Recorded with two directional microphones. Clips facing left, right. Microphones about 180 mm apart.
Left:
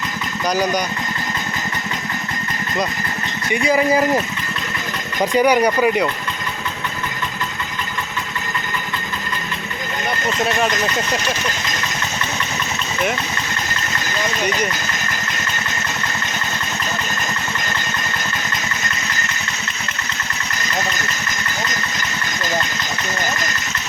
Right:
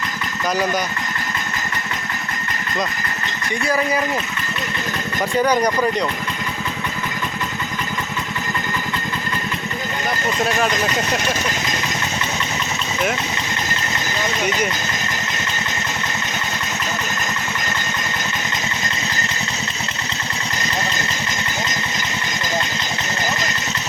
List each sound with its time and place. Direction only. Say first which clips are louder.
0.5 s speech: left 2 dB; centre (ahead or behind)
3.5 s speech: left 4 dB; 15° left (ahead or behind)
5.2 s speech: left 3 dB; 15° left (ahead or behind)